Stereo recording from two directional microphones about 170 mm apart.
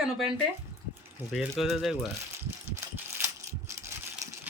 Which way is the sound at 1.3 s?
Centre (ahead or behind).